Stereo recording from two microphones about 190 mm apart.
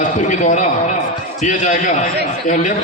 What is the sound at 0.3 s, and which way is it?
A man's voice, 40° left (ahead or behind).